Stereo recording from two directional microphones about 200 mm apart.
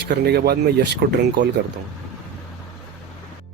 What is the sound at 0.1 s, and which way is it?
Speech, 55° right (ahead or behind).